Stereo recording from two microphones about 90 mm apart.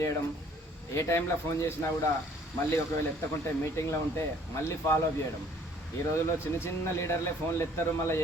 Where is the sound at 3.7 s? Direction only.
30° left (ahead or behind).